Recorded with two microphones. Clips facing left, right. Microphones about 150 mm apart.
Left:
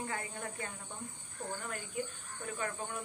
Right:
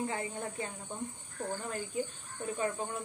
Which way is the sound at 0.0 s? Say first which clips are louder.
Right 4 dB; 25° right (ahead or behind).